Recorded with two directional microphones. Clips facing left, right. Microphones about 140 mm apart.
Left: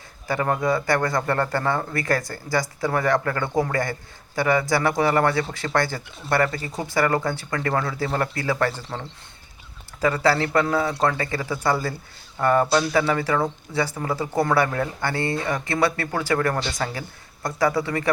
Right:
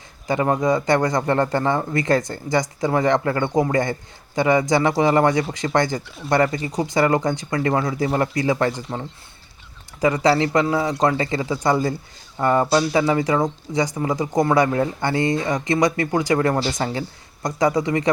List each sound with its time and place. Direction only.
0.3 s speech: 20° right (ahead or behind)